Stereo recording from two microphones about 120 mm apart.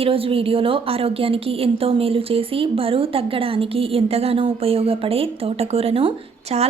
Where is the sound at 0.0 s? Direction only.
50° right (ahead or behind).